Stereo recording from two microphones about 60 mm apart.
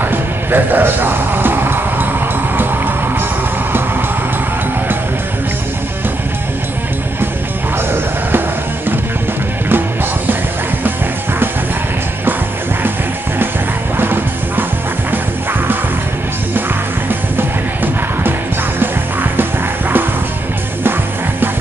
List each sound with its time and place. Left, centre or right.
0.0 s music: right
13.9 s music: right